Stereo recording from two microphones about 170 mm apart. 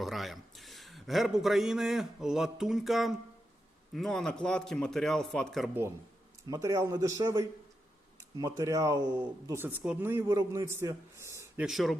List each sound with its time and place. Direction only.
0.0 s a man's voice: centre (ahead or behind)
6.5 s speech: 20° right (ahead or behind)
11.6 s a man's voice: centre (ahead or behind)